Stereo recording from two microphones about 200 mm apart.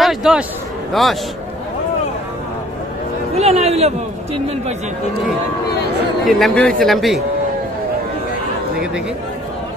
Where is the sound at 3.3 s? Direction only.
30° right (ahead or behind).